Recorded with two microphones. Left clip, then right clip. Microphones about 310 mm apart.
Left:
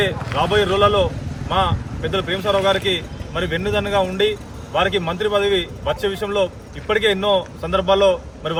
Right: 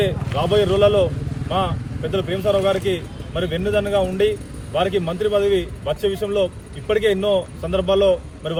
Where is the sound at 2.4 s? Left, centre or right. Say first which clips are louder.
Right 1 dB; left.